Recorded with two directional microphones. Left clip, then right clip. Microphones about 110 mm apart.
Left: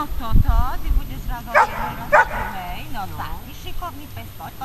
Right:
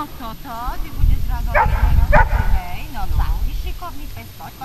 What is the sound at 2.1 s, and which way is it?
Speech, 30° left (ahead or behind).